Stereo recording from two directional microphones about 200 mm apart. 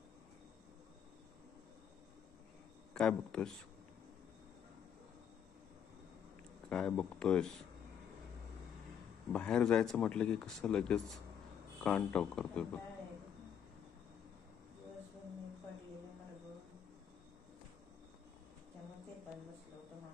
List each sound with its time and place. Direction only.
2.9 s a man's voice: 5° left (ahead or behind)
6.7 s speech: 5° left (ahead or behind)
9.3 s speech: 5° left (ahead or behind)